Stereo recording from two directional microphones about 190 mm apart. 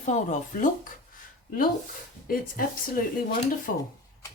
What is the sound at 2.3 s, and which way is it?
Speech, 50° left (ahead or behind).